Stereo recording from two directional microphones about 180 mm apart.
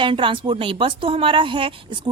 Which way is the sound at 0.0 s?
30° right (ahead or behind).